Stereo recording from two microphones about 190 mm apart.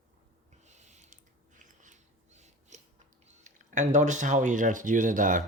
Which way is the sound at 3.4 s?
40° right (ahead or behind).